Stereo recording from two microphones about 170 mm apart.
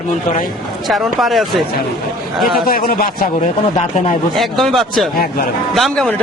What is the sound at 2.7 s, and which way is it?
Speech, 60° left (ahead or behind).